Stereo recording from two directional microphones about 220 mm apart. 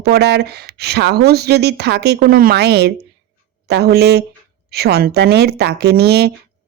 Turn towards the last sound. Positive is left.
turn(degrees=-45)  # may be behind; listen again after turning